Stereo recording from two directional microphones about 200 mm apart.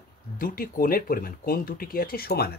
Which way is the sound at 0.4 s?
45° left (ahead or behind).